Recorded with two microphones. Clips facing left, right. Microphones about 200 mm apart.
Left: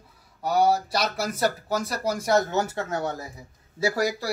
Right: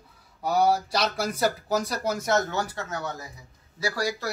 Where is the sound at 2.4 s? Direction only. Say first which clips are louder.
Left 4 dB; 25° left (ahead or behind).